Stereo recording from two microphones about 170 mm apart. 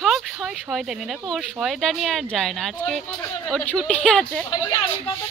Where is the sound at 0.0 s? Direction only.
Centre (ahead or behind).